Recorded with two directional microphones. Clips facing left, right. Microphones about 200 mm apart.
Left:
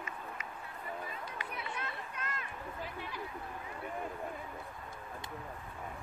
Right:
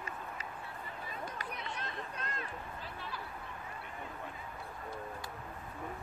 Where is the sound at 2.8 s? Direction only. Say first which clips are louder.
Left 2 dB; 15° left (ahead or behind).